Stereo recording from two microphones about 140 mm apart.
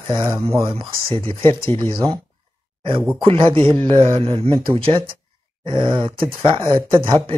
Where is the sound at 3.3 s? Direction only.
40° right (ahead or behind).